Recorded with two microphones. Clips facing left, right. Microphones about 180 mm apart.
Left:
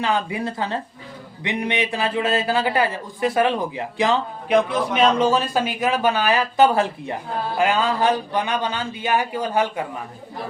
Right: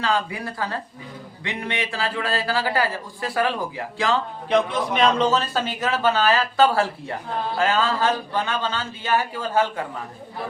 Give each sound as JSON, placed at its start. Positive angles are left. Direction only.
{"t": 0.0, "sound": "speech", "side_deg": 20}
{"t": 4.5, "sound": "a man's voice", "side_deg": 5}